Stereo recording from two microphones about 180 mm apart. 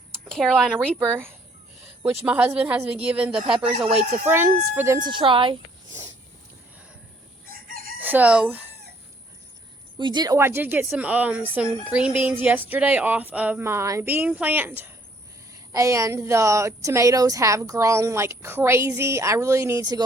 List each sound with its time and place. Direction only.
0.1 s speech: 5° left (ahead or behind)
0.9 s speech: 15° right (ahead or behind)
3.5 s speech: 35° right (ahead or behind)
4.3 s speech: 15° right (ahead or behind)
5.0 s speech: 25° right (ahead or behind)
7.7 s chicken: 55° right (ahead or behind)
7.9 s chicken: 10° right (ahead or behind)
10.0 s speech: 25° right (ahead or behind)